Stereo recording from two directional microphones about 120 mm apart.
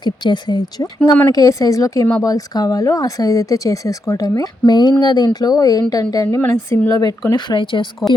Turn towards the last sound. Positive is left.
turn(degrees=40)  # may be behind; listen again after turning